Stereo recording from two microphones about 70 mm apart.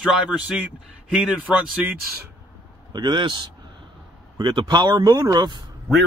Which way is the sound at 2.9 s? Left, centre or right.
Right.